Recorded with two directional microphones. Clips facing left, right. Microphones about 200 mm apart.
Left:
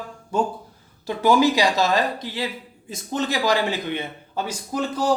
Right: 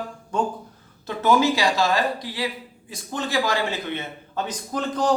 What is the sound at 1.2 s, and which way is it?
A man's voice, 20° left (ahead or behind).